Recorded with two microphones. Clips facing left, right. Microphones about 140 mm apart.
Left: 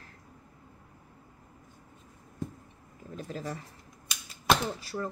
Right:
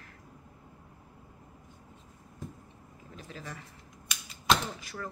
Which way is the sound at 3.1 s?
40° left (ahead or behind).